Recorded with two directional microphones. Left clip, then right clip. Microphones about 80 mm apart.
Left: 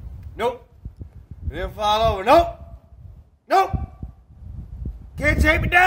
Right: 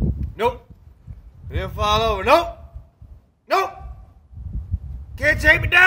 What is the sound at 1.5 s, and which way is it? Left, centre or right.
Speech, left.